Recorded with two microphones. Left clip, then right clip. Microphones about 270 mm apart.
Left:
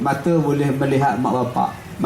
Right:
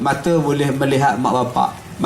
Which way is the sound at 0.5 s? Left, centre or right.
Centre.